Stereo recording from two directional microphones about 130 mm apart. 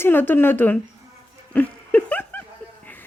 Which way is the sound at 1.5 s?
10° left (ahead or behind).